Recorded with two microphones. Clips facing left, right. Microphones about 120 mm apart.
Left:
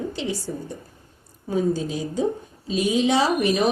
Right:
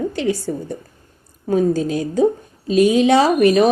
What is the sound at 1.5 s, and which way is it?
Speech, 60° right (ahead or behind).